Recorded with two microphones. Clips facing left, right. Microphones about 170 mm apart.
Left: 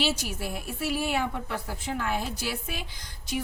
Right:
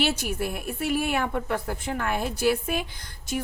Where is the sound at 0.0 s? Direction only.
55° right (ahead or behind).